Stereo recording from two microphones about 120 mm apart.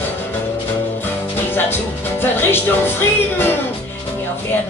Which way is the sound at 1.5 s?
15° left (ahead or behind).